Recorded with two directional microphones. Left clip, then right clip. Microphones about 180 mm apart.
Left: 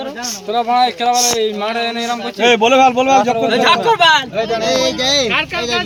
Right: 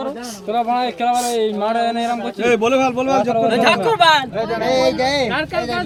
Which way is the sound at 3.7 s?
10° left (ahead or behind).